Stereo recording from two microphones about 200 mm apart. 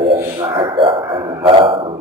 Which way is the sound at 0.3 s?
25° right (ahead or behind).